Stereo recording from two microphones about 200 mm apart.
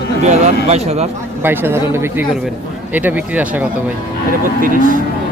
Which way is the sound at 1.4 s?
10° right (ahead or behind).